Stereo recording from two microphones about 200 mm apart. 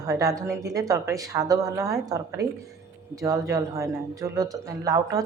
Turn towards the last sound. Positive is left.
turn(degrees=-15)  # may be behind; listen again after turning